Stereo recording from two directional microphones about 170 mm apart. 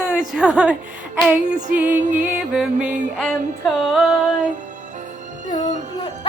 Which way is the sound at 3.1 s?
Centre (ahead or behind).